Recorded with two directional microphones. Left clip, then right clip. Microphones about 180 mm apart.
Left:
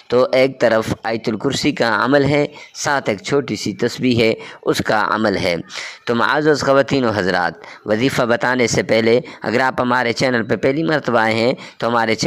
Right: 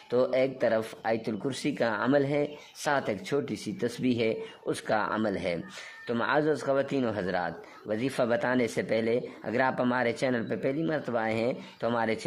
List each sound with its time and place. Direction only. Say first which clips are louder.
0.1 s speech: left 12 dB; 35° left (ahead or behind)